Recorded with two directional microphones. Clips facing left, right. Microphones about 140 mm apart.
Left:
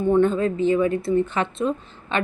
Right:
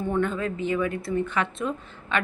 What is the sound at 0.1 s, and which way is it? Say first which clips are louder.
Speech: left 9 dB; 30° left (ahead or behind).